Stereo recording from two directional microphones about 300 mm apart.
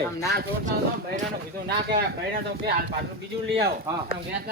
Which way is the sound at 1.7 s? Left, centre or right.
Right.